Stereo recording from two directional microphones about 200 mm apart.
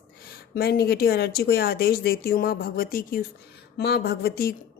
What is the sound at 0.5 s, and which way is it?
A woman's voice, 50° left (ahead or behind).